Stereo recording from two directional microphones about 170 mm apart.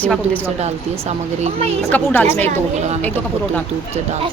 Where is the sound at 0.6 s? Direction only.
40° right (ahead or behind).